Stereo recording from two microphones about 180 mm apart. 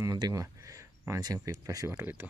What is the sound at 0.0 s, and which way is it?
Speech, 20° right (ahead or behind).